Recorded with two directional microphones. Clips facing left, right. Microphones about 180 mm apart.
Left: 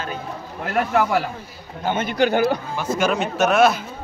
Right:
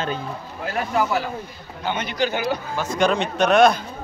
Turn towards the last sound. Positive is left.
turn(degrees=5)  # may be behind; listen again after turning